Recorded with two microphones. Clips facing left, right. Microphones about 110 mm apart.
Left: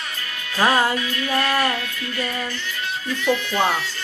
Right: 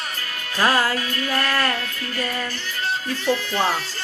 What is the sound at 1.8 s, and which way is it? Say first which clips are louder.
Speech: even; 40° right (ahead or behind).